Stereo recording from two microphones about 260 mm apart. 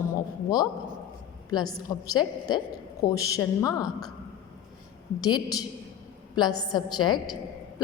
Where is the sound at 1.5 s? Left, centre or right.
Centre.